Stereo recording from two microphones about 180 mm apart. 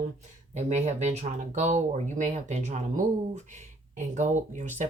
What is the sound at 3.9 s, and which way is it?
Speech, 40° right (ahead or behind).